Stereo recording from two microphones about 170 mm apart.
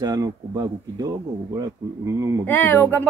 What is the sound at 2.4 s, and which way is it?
Speech, 15° left (ahead or behind).